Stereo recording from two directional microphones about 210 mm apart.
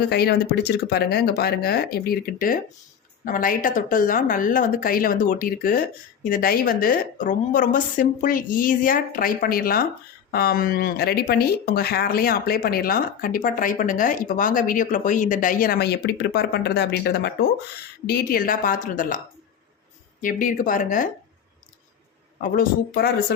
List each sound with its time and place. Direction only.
0.1 s a woman's voice: 50° left (ahead or behind)
20.2 s a woman's voice: 40° left (ahead or behind)
22.4 s speech: 45° left (ahead or behind)